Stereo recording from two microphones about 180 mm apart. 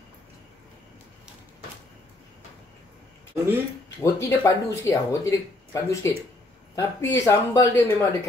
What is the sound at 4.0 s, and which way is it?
Speech, 15° left (ahead or behind).